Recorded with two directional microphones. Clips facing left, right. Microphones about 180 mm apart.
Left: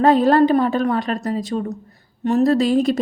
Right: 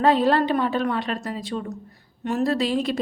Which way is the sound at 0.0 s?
45° left (ahead or behind).